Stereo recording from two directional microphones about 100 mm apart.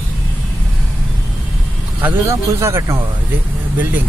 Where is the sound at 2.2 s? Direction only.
30° right (ahead or behind).